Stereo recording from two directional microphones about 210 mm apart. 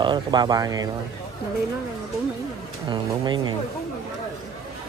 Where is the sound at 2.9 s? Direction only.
20° right (ahead or behind).